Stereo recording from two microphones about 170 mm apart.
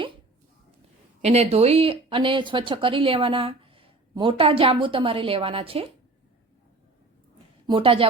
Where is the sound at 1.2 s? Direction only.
40° right (ahead or behind).